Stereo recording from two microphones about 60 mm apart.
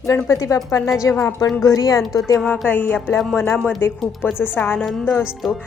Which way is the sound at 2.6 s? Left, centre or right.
Left.